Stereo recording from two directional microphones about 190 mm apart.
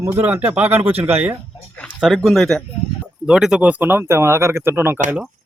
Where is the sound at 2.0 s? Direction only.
Centre (ahead or behind).